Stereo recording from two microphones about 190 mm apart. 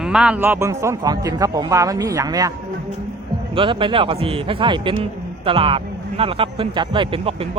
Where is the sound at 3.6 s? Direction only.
25° right (ahead or behind).